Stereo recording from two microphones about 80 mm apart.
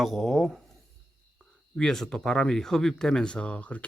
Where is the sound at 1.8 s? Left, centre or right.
Centre.